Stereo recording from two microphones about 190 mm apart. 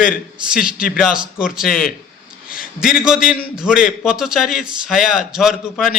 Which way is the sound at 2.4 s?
50° left (ahead or behind).